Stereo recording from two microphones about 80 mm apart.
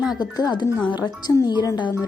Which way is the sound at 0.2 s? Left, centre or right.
Left.